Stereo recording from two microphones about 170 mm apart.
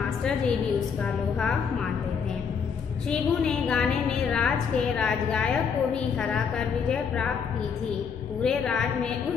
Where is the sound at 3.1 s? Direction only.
5° left (ahead or behind).